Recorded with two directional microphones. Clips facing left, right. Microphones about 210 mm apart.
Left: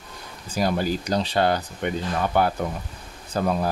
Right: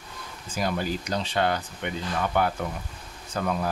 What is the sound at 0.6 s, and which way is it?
Speech, 35° left (ahead or behind).